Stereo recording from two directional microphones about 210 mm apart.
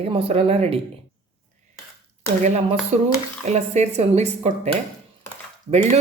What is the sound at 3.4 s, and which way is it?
Speech, 30° right (ahead or behind).